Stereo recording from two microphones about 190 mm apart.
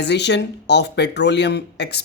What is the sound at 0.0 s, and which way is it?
Speech, 65° left (ahead or behind).